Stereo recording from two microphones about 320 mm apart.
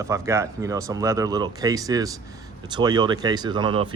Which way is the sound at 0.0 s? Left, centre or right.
Centre.